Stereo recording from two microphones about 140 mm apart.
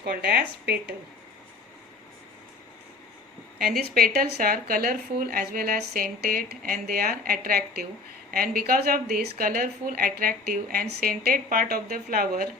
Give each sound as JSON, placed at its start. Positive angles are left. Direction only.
{"t": 0.1, "sound": "speech", "side_deg": -90}
{"t": 3.6, "sound": "speech", "side_deg": -90}